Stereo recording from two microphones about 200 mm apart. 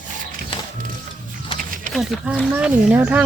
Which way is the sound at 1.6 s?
45° right (ahead or behind).